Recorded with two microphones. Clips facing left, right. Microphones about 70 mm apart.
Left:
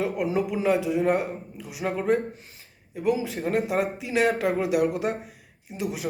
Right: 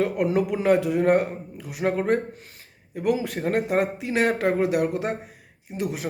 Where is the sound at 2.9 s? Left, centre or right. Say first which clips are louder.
Right 1 dB; right.